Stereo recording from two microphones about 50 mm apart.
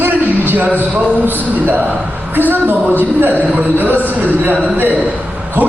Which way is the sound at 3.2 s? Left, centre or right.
Right.